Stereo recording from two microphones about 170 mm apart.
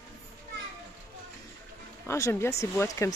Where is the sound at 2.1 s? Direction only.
15° left (ahead or behind).